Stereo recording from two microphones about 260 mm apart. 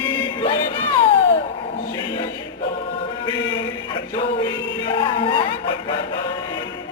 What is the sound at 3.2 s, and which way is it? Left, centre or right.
Chant, centre.